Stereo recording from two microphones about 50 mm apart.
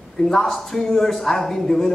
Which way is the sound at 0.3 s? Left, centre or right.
Centre.